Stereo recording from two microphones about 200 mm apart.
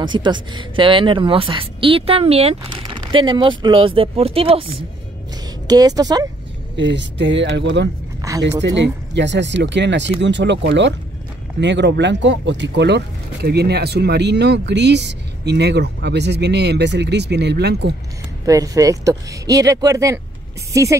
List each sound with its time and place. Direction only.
0.0 s speech: 20° right (ahead or behind)
5.7 s speech: 20° right (ahead or behind)
6.8 s speech: 65° right (ahead or behind)
8.2 s a sound: 15° right (ahead or behind)
8.6 s speech: 60° right (ahead or behind)
18.4 s speech: 15° right (ahead or behind)